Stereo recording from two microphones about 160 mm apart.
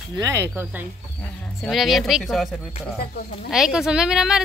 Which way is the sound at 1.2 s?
5° left (ahead or behind).